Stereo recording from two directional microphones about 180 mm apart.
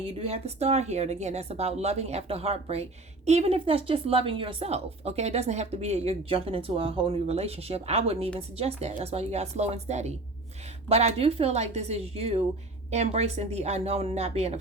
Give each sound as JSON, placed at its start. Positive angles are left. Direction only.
{"t": 0.0, "sound": "a woman's voice", "side_deg": -35}